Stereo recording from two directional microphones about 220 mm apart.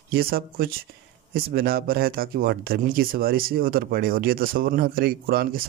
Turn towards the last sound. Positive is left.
turn(degrees=-45)  # may be behind; listen again after turning